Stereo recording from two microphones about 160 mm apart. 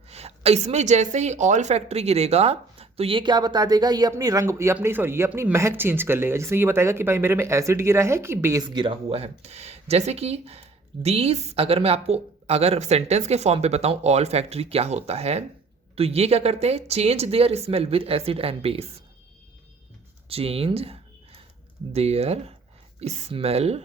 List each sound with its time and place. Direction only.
0.1 s a woman's voice: 40° right (ahead or behind); by 8.6 s 15° right (ahead or behind)
8.6 s speech: 30° right (ahead or behind)
20.2 s speech: 35° right (ahead or behind)